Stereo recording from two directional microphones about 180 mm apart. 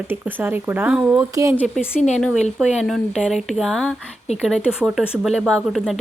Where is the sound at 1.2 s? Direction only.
20° right (ahead or behind).